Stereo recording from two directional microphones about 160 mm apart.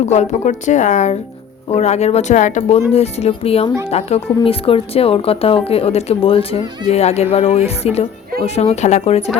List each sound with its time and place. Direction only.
0.0 s a woman's voice: 45° left (ahead or behind)